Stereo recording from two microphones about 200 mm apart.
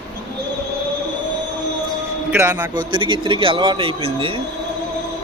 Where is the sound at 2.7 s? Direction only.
25° right (ahead or behind).